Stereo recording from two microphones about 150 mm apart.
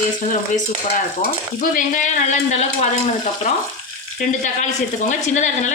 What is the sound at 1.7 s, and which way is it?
Speech, 60° left (ahead or behind).